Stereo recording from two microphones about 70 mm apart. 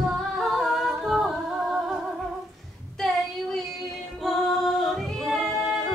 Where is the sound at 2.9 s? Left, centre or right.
Centre.